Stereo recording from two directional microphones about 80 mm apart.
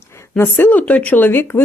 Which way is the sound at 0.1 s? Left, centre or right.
Left.